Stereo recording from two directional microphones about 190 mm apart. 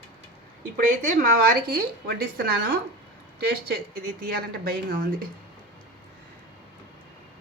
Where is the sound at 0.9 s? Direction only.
45° right (ahead or behind).